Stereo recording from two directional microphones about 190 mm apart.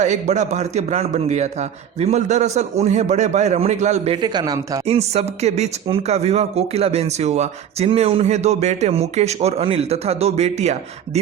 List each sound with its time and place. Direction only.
0.0 s speech: 40° right (ahead or behind)
4.2 s speech: 20° right (ahead or behind)
4.9 s speech: 35° right (ahead or behind)